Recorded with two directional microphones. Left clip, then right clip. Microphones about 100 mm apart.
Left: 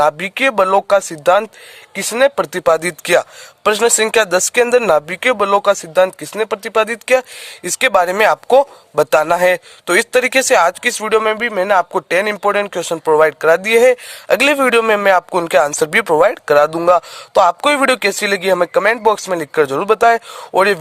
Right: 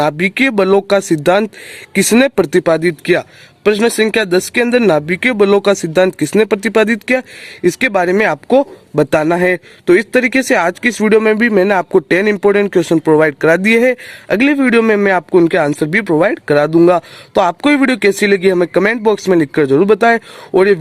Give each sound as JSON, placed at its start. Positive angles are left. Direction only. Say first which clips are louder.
{"t": 0.0, "sound": "speech", "louder": "even", "side_deg": 40}
{"t": 2.0, "sound": "speech", "louder": "right 2 dB", "side_deg": 20}
{"t": 2.6, "sound": "speech", "louder": "right 1 dB", "side_deg": 60}
{"t": 7.0, "sound": "speech", "louder": "left 2 dB", "side_deg": 50}
{"t": 11.2, "sound": "speech", "louder": "right 4 dB", "side_deg": 10}
{"t": 12.0, "sound": "speech", "louder": "right 3 dB", "side_deg": 30}